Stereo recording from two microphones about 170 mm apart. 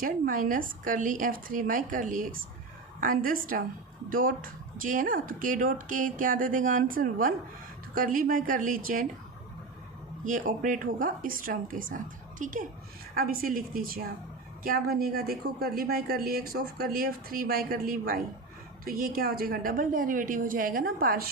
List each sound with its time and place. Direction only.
0.0 s speech: 55° right (ahead or behind)
10.2 s speech: 50° right (ahead or behind)